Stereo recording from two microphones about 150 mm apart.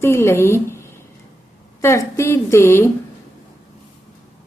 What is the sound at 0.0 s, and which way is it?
A woman's voice, 15° left (ahead or behind).